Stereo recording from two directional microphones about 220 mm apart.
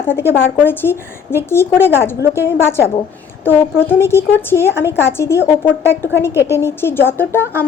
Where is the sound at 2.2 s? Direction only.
10° right (ahead or behind).